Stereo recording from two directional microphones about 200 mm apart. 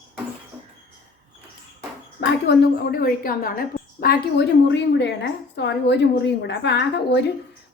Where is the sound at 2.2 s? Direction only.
50° left (ahead or behind).